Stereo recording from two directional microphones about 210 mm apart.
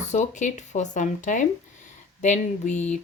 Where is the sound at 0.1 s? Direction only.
35° left (ahead or behind).